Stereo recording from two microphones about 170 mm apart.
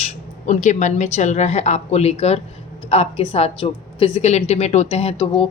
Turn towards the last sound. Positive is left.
turn(degrees=30)  # may be behind; listen again after turning